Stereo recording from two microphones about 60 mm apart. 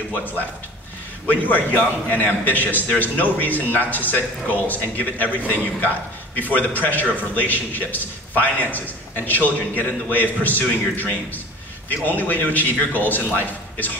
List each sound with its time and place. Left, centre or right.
0.1 s a man's voice: left